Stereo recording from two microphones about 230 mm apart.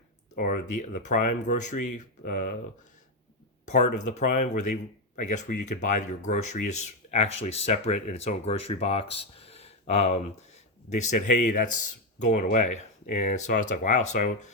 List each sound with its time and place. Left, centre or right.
0.3 s speech: left
3.7 s speech: left